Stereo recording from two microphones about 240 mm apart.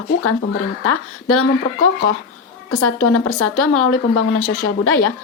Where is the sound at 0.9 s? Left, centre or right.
Left.